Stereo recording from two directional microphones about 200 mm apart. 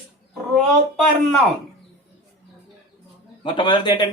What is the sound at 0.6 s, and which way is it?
Speech, centre (ahead or behind).